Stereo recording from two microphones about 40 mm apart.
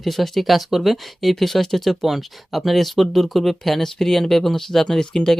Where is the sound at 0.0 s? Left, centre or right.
Centre.